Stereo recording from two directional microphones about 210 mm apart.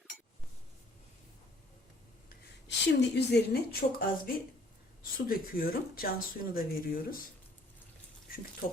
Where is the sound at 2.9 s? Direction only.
55° left (ahead or behind).